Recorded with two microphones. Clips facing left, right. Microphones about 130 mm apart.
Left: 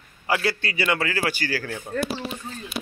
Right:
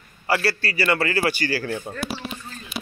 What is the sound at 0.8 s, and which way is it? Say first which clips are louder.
A man's voice: right 3 dB; 5° right (ahead or behind).